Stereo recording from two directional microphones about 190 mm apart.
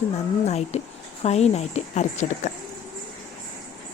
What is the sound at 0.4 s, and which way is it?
Speech, 35° left (ahead or behind).